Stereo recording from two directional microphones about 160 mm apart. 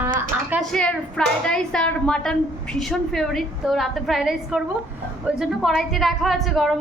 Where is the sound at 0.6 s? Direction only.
5° left (ahead or behind).